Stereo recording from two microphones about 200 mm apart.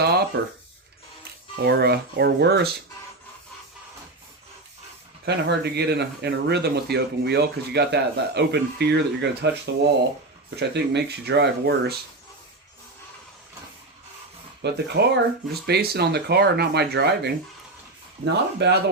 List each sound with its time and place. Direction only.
0.0 s a sound: 55° right (ahead or behind)
1.6 s speech: 55° right (ahead or behind)
5.2 s speech: 55° right (ahead or behind)
10.6 s speech: 55° right (ahead or behind)
14.6 s speech: 55° right (ahead or behind)